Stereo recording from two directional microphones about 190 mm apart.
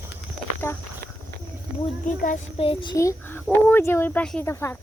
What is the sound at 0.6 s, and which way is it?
Walk, 10° left (ahead or behind).